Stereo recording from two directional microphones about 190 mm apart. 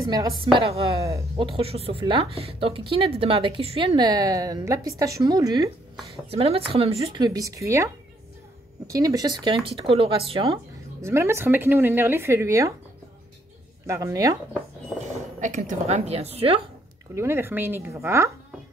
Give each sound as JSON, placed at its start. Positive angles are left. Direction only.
{"t": 0.4, "sound": "speech", "side_deg": -25}
{"t": 0.9, "sound": "speech", "side_deg": -15}
{"t": 1.4, "sound": "speech", "side_deg": -30}
{"t": 7.2, "sound": "speech", "side_deg": -20}
{"t": 11.0, "sound": "speech", "side_deg": -15}
{"t": 13.8, "sound": "speech", "side_deg": -15}
{"t": 15.4, "sound": "a woman's voice", "side_deg": -40}
{"t": 17.1, "sound": "speech", "side_deg": -15}